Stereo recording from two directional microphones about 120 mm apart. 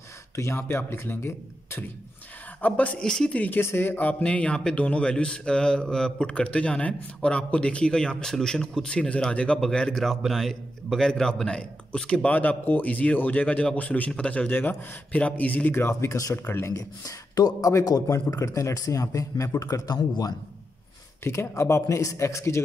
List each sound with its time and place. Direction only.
0.4 s speech: 20° left (ahead or behind)
21.2 s speech: 20° left (ahead or behind)